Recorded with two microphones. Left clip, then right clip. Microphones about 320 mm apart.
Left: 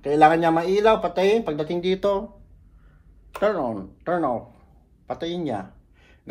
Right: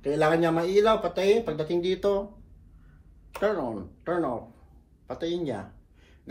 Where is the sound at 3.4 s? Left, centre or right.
Left.